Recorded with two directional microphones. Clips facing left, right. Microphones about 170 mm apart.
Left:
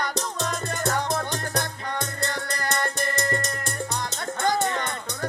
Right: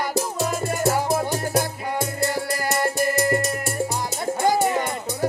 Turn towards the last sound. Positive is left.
turn(degrees=-10)  # may be behind; listen again after turning